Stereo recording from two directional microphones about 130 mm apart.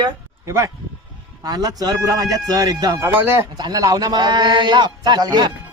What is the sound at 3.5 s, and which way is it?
Speech, 30° right (ahead or behind).